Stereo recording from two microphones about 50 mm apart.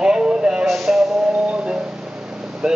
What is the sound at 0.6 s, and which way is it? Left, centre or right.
Speech, centre.